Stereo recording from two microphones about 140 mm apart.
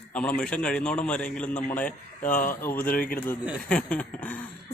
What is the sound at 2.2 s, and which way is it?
Speech, 70° left (ahead or behind).